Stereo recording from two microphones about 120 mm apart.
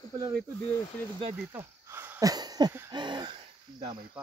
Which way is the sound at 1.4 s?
20° right (ahead or behind).